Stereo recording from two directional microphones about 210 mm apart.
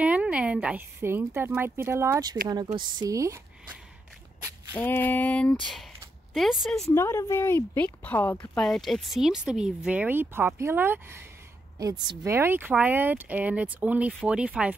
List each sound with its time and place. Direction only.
0.0 s speech: 5° right (ahead or behind)
4.7 s a woman's voice: 10° left (ahead or behind)
6.9 s a woman's voice: 10° left (ahead or behind); by 14.8 s 5° right (ahead or behind)